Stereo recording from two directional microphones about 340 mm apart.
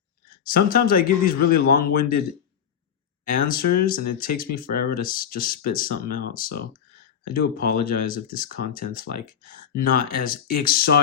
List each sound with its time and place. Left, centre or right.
0.4 s speech: left
3.4 s speech: left